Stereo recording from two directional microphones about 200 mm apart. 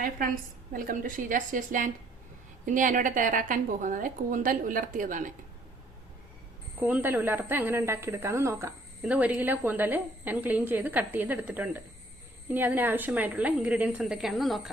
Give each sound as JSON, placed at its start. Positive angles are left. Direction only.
{"t": 0.0, "sound": "a woman's voice", "side_deg": -45}
{"t": 6.7, "sound": "a woman's voice", "side_deg": -10}